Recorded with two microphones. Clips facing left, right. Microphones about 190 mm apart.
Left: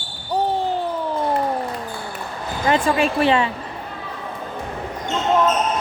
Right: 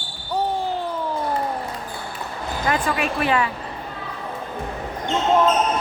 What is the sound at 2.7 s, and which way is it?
Speech, 30° left (ahead or behind).